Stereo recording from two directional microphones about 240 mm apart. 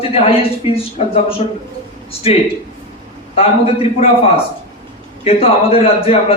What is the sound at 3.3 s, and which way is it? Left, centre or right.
Speech, left.